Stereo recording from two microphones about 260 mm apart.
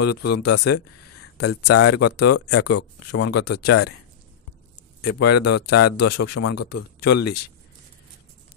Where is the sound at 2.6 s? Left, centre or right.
Left.